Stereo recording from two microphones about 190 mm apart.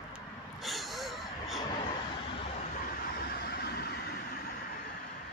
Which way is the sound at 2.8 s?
50° left (ahead or behind).